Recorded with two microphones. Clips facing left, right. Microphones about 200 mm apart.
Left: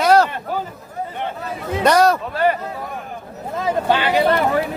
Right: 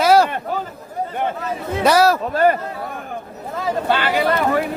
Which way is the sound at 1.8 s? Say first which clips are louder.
Even; 5° right (ahead or behind).